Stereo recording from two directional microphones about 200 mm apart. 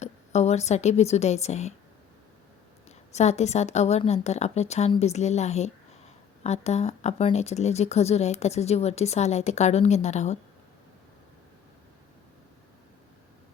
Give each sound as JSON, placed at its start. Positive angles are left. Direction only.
{"t": 0.0, "sound": "a woman's voice", "side_deg": 35}
{"t": 3.2, "sound": "a woman's voice", "side_deg": 35}